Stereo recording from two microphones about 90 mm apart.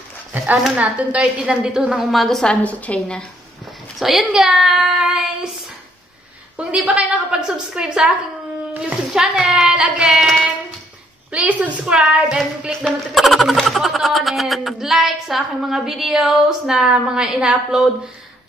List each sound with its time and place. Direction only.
0.7 s speech: 15° right (ahead or behind)
2.0 s speech: centre (ahead or behind)
2.5 s a woman's voice: 15° left (ahead or behind)
4.0 s speech: centre (ahead or behind)
6.6 s a woman's voice: 15° right (ahead or behind)
11.3 s speech: 15° right (ahead or behind)